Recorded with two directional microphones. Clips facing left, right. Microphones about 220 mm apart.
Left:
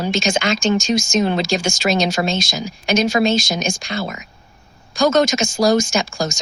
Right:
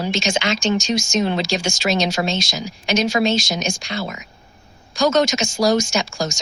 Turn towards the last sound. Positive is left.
turn(degrees=50)  # may be behind; listen again after turning